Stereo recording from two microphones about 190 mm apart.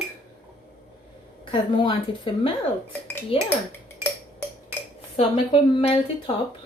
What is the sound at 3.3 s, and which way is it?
Speech, 30° left (ahead or behind).